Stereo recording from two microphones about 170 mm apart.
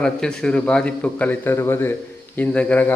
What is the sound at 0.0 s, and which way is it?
A man's voice, 5° left (ahead or behind).